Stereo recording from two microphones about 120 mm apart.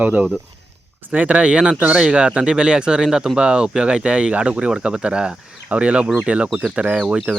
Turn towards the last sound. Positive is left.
turn(degrees=-5)  # may be behind; listen again after turning